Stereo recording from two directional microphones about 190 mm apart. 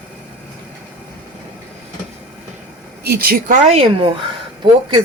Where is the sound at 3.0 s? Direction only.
55° right (ahead or behind).